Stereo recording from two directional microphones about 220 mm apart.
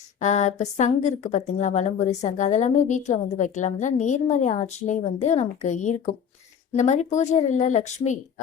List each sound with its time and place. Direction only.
0.2 s a woman's voice: 35° left (ahead or behind)